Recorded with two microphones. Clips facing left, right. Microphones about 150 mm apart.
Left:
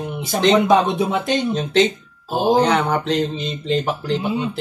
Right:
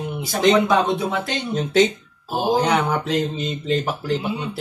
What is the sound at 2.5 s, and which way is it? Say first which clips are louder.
Speech: left 2 dB; 10° right (ahead or behind).